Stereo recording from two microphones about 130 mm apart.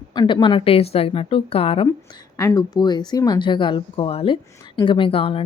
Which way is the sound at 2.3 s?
25° left (ahead or behind).